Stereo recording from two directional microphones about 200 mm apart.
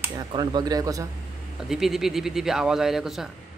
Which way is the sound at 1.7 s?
Centre (ahead or behind).